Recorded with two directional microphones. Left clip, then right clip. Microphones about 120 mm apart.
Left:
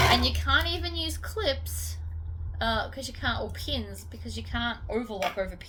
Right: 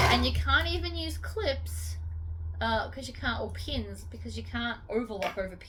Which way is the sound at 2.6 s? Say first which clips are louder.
Left 1 dB; 40° left (ahead or behind).